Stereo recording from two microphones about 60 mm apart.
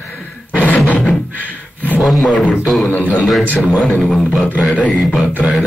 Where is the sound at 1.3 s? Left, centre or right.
Left.